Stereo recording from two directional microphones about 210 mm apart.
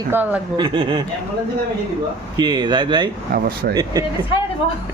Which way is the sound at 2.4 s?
20° right (ahead or behind).